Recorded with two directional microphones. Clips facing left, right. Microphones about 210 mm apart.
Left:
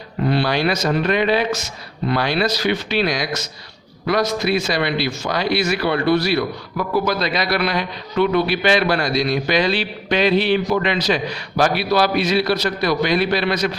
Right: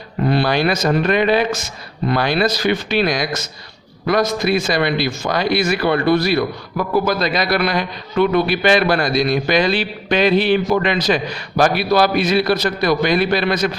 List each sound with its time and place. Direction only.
0.3 s a man's voice: 50° right (ahead or behind)